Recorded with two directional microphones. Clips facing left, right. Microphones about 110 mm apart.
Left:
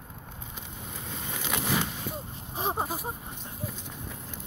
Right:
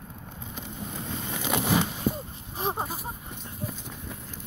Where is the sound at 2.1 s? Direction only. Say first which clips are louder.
Right 8 dB; 40° right (ahead or behind).